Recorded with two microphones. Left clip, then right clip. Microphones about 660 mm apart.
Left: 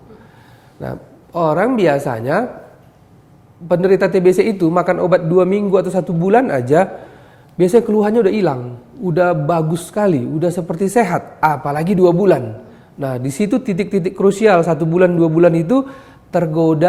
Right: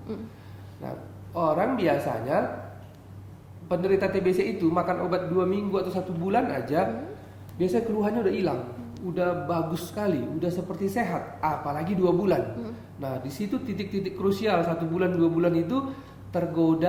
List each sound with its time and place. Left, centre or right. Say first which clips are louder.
0.8 s a man's voice: left 10 dB; left
3.7 s a man's voice: left 11 dB; left